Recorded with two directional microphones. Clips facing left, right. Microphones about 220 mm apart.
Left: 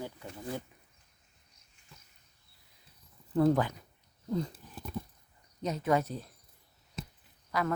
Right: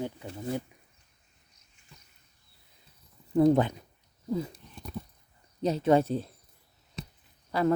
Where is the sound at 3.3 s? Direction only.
20° right (ahead or behind).